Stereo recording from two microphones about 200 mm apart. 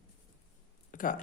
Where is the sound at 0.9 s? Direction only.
40° left (ahead or behind).